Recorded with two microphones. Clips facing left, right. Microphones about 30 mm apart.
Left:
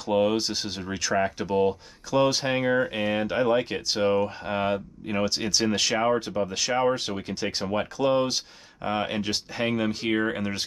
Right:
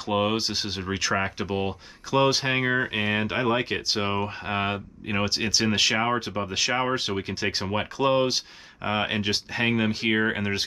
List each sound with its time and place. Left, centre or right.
0.0 s speech: centre